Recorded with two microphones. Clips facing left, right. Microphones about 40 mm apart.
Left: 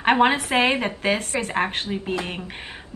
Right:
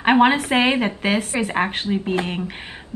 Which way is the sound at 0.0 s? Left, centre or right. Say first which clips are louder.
Right 3 dB; centre.